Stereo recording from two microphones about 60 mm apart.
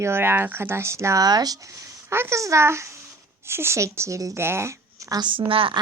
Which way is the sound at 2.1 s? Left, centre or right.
Right.